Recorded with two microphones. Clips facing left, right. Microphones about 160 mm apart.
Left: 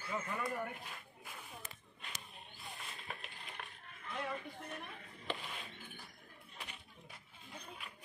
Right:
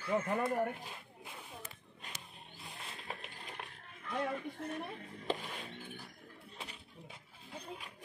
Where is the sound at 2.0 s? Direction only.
40° right (ahead or behind).